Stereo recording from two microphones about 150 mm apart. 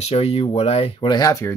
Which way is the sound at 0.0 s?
45° left (ahead or behind).